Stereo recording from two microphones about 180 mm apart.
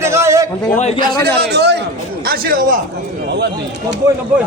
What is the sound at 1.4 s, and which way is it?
Speech, 70° right (ahead or behind).